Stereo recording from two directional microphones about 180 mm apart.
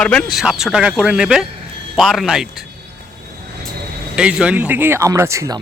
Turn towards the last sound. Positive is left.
turn(degrees=-20)  # may be behind; listen again after turning